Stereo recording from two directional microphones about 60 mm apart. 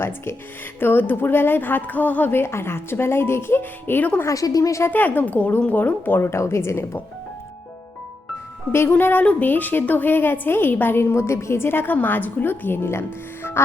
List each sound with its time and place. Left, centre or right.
0.8 s a woman's voice: left
2.4 s speech: left
4.3 s a woman's voice: left
4.9 s a woman's voice: left
8.9 s a woman's voice: left